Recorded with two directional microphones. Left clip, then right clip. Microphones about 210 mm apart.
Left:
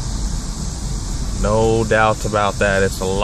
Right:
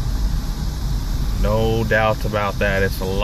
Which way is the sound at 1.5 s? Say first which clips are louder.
Left 4 dB; 20° left (ahead or behind).